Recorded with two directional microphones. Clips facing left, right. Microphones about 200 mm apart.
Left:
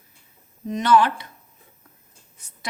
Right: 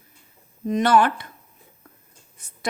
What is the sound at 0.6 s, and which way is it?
Speech, 55° right (ahead or behind).